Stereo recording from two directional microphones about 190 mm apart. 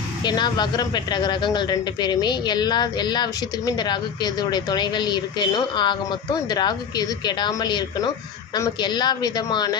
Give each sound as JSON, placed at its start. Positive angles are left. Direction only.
{"t": 0.2, "sound": "speech", "side_deg": 20}